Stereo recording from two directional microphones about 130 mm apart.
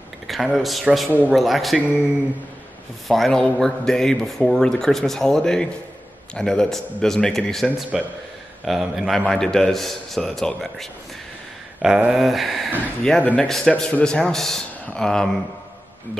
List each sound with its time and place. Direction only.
0.3 s a man's voice: centre (ahead or behind)
3.1 s a man's voice: 5° left (ahead or behind)